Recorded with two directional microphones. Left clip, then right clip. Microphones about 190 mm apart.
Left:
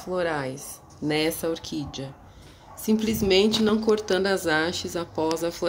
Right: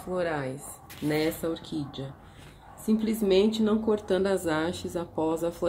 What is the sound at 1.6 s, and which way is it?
Speech, 35° left (ahead or behind).